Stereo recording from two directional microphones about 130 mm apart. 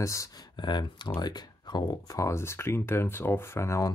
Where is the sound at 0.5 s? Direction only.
35° left (ahead or behind).